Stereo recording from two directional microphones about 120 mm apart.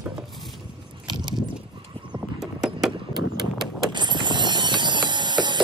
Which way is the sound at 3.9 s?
40° right (ahead or behind).